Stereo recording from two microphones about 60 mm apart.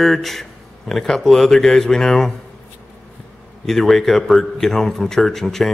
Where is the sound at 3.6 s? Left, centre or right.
Centre.